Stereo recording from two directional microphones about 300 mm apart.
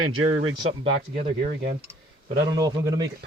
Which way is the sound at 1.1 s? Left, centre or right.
Right.